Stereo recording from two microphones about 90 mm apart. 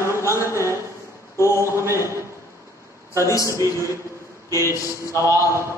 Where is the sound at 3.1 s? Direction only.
35° left (ahead or behind).